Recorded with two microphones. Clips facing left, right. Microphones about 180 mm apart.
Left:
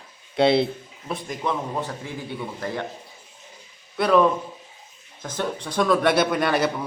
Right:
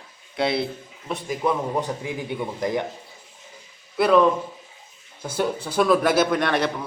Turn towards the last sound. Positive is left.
turn(degrees=5)  # may be behind; listen again after turning